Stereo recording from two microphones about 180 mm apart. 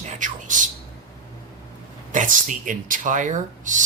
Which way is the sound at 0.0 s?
40° right (ahead or behind).